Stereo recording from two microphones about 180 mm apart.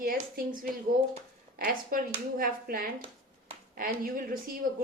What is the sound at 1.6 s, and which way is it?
Speech, 50° right (ahead or behind).